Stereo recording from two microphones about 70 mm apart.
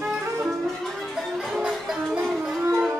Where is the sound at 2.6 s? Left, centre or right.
Right.